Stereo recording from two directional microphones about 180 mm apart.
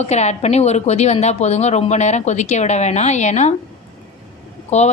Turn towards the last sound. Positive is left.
turn(degrees=40)  # may be behind; listen again after turning